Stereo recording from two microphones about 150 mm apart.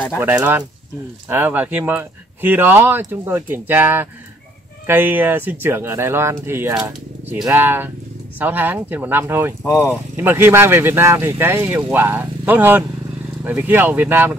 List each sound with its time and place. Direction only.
1.3 s speech: 10° right (ahead or behind)
9.7 s speech: 15° left (ahead or behind)
10.1 s speech: 15° right (ahead or behind)